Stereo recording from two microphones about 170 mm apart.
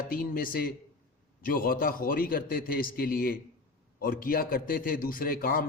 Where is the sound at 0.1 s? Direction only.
60° left (ahead or behind).